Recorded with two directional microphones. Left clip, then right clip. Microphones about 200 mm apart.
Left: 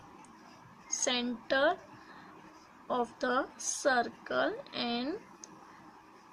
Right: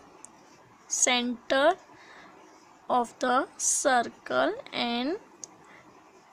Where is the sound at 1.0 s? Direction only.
50° right (ahead or behind).